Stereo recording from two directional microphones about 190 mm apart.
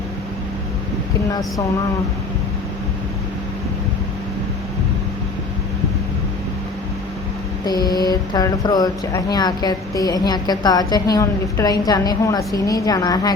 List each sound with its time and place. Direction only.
7.6 s speech: 20° left (ahead or behind)